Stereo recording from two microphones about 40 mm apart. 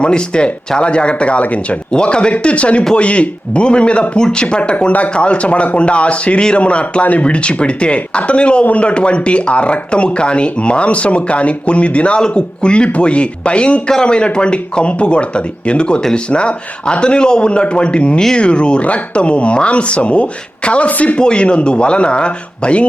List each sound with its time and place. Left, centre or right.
0.0 s speech: left